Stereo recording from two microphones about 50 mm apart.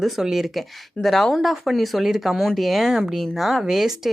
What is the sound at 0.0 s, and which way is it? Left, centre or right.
A woman's voice, centre.